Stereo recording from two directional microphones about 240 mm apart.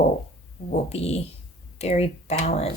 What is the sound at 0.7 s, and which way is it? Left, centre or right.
Speech, left.